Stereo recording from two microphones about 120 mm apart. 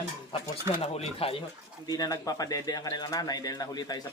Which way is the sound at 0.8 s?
55° left (ahead or behind).